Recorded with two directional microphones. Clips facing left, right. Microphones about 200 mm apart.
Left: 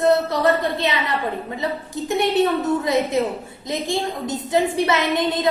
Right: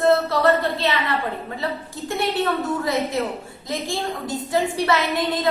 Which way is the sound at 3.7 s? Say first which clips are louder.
Left 3 dB; 20° left (ahead or behind).